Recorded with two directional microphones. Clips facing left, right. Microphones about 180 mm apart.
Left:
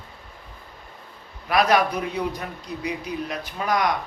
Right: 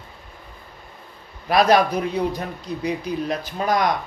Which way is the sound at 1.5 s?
35° right (ahead or behind).